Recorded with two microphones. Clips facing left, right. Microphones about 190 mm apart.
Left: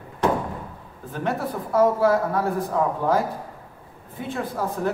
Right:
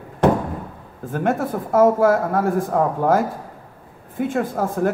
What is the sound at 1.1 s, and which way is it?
A woman's voice, 50° right (ahead or behind).